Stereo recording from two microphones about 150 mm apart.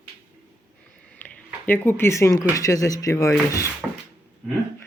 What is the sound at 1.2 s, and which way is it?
Speech, 10° left (ahead or behind).